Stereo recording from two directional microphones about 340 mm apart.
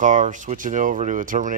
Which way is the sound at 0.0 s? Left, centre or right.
Right.